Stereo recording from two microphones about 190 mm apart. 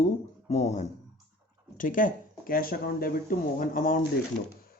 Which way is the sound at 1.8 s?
45° left (ahead or behind).